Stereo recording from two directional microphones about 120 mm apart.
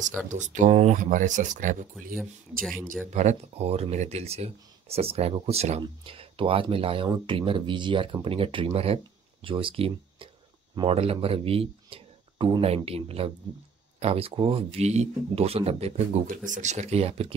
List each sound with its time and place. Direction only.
0.3 s speech: 90° right
2.1 s speech: 5° left (ahead or behind)
3.1 s speech: 75° right (ahead or behind); by 5.8 s 60° right (ahead or behind)
5.8 s speech: 45° right (ahead or behind)